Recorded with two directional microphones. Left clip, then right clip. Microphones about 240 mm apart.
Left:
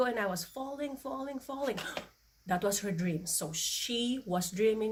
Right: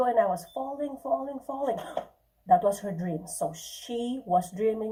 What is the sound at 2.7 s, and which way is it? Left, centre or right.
A woman's voice, left.